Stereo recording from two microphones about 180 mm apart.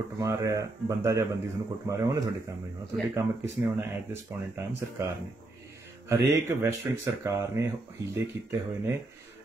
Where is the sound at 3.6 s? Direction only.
15° right (ahead or behind).